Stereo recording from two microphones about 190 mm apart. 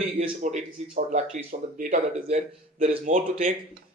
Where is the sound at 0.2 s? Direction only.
40° right (ahead or behind).